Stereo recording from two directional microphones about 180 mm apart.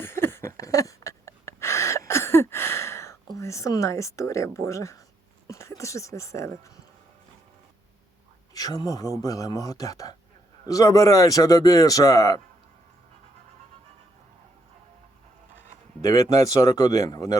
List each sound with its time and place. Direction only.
0.0 s a sound: 15° left (ahead or behind)
3.3 s speech: 15° left (ahead or behind)
8.5 s a man's voice: 20° left (ahead or behind)
16.0 s a man's voice: 20° left (ahead or behind)